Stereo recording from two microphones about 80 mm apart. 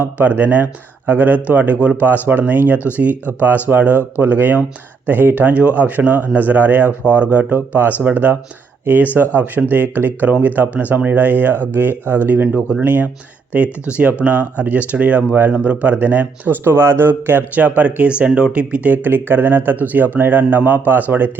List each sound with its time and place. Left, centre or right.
0.0 s speech: right